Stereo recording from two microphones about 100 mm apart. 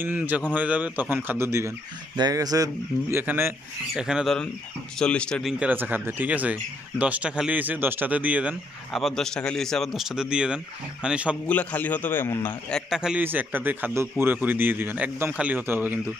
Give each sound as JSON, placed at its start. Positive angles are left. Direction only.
{"t": 0.0, "sound": "speech", "side_deg": -15}
{"t": 2.1, "sound": "speech", "side_deg": -40}
{"t": 3.2, "sound": "a man's voice", "side_deg": -20}
{"t": 3.9, "sound": "speech", "side_deg": -5}
{"t": 4.9, "sound": "a man's voice", "side_deg": 10}
{"t": 5.4, "sound": "speech", "side_deg": -5}
{"t": 5.7, "sound": "speech", "side_deg": -20}
{"t": 8.9, "sound": "speech", "side_deg": 0}
{"t": 11.4, "sound": "a man's voice", "side_deg": 15}
{"t": 12.9, "sound": "speech", "side_deg": -5}
{"t": 13.2, "sound": "a man's voice", "side_deg": -20}